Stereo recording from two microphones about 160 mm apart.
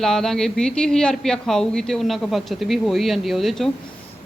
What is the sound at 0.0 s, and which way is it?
Speech, 5° left (ahead or behind).